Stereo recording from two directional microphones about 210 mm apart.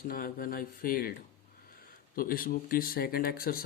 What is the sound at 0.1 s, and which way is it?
Speech, 40° left (ahead or behind).